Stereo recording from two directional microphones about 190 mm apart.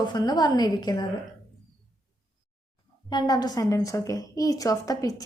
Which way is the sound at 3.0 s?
20° left (ahead or behind).